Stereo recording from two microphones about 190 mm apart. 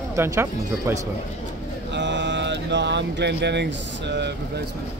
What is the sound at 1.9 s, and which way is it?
Speech, 70° right (ahead or behind).